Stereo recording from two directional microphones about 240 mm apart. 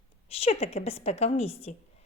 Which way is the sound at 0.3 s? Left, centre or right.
Left.